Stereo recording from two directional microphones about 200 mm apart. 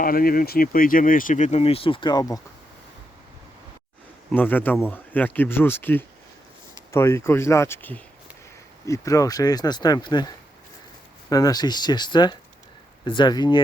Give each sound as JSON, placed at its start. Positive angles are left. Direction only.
{"t": 0.0, "sound": "speech", "side_deg": 45}
{"t": 4.3, "sound": "speech", "side_deg": 10}